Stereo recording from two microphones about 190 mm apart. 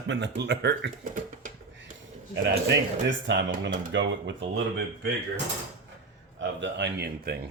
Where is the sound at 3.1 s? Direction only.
70° right (ahead or behind).